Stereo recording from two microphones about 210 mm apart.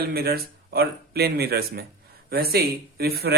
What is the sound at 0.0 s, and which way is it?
Speech, 45° right (ahead or behind).